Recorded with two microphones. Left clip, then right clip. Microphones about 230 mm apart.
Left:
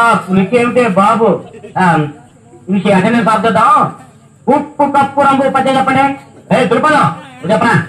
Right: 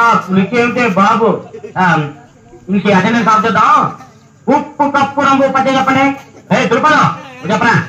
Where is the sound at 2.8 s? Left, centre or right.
Left.